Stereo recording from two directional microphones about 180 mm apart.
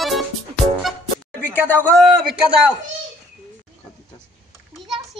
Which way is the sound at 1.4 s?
10° left (ahead or behind).